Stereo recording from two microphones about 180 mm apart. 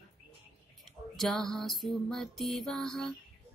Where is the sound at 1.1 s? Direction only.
Centre (ahead or behind).